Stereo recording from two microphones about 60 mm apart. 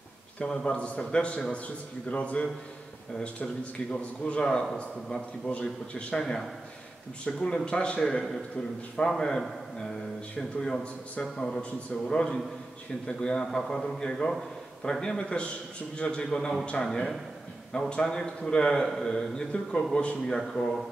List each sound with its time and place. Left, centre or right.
0.6 s a man's voice: centre
3.9 s a man's voice: centre
10.6 s a man's voice: centre
20.3 s speech: centre